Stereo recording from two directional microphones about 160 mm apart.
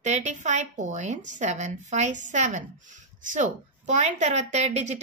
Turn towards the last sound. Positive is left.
turn(degrees=-45)  # may be behind; listen again after turning